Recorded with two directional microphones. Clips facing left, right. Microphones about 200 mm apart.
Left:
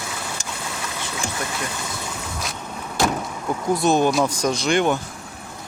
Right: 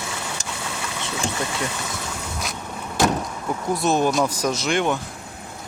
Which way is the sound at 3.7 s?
Centre (ahead or behind).